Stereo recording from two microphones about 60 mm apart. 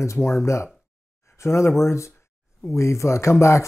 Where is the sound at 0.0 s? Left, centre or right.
Left.